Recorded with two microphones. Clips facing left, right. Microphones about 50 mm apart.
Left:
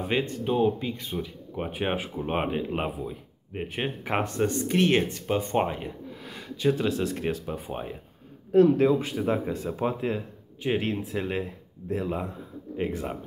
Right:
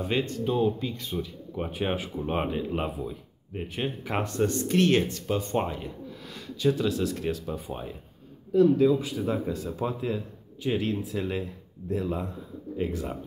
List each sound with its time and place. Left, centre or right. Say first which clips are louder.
0.0 s speech: even; left
8.5 s speech: left 1 dB; left